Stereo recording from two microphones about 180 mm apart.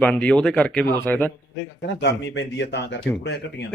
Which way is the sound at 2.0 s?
75° left (ahead or behind).